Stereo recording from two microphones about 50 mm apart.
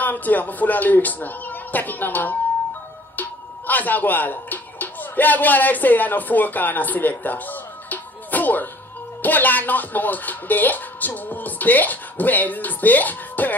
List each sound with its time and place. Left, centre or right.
0.0 s speech: left